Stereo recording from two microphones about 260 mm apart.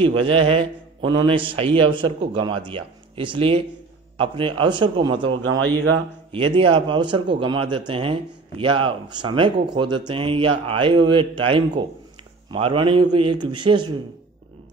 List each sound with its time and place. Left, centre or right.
0.0 s a man's voice: right
5.3 s a man's voice: right
6.3 s a man's voice: centre